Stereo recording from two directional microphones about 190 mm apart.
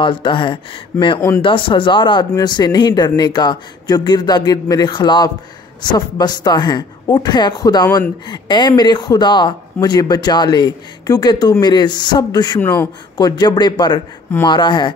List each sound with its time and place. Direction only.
0.0 s speech: 25° left (ahead or behind)